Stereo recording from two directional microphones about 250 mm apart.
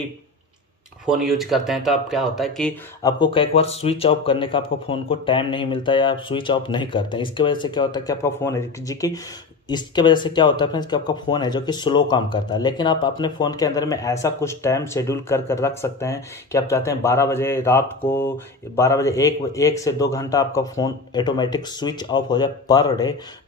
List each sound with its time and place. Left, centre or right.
1.0 s speech: centre
3.0 s speech: centre